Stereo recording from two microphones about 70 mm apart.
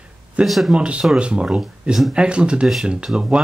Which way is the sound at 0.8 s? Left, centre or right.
Centre.